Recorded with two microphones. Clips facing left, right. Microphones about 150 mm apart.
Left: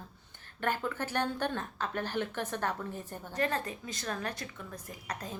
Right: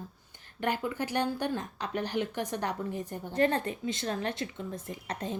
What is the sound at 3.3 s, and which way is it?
Speech, 30° right (ahead or behind).